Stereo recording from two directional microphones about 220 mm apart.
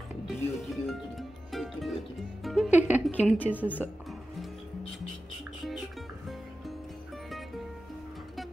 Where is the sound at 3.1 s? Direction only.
5° left (ahead or behind).